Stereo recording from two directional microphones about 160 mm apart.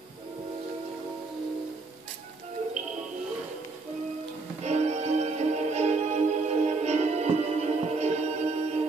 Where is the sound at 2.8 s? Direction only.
45° right (ahead or behind).